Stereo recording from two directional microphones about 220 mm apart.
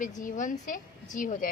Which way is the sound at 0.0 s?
35° left (ahead or behind).